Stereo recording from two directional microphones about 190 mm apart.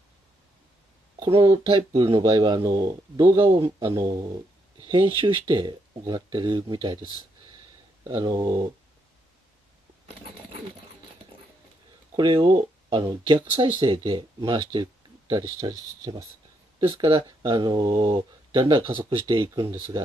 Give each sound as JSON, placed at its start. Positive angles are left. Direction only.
{"t": 1.2, "sound": "speech", "side_deg": -30}
{"t": 12.2, "sound": "speech", "side_deg": -25}